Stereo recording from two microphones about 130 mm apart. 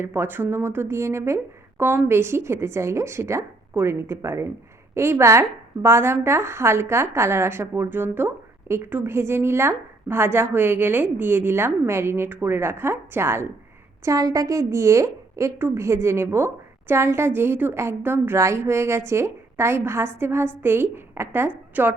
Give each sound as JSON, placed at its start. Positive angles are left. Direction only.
{"t": 0.0, "sound": "a woman's voice", "side_deg": -15}